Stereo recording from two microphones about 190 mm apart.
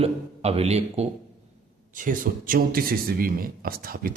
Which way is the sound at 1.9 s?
45° right (ahead or behind).